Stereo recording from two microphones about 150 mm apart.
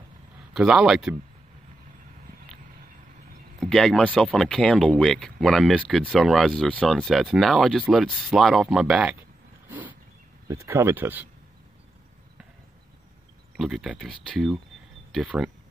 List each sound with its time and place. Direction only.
0.5 s speech: 5° right (ahead or behind)
3.5 s speech: centre (ahead or behind)
9.7 s a sound: 10° right (ahead or behind)
10.5 s speech: 20° right (ahead or behind)
13.6 s speech: 5° right (ahead or behind)